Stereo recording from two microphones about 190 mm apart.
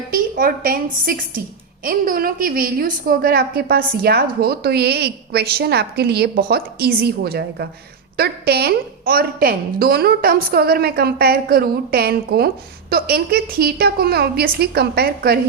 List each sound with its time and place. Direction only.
0.1 s a woman's voice: 50° right (ahead or behind)